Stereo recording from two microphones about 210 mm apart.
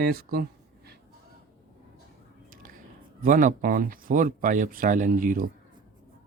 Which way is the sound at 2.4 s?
40° right (ahead or behind).